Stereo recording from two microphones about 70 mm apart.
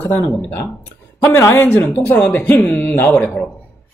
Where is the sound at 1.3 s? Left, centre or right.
Left.